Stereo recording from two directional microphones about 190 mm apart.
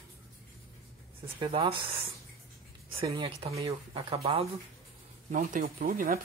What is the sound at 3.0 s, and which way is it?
Speech, 30° right (ahead or behind).